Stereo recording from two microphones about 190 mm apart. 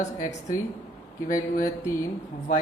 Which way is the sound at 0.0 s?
40° left (ahead or behind).